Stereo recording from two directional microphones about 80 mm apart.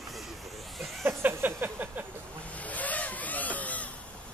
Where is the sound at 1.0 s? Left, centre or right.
Right.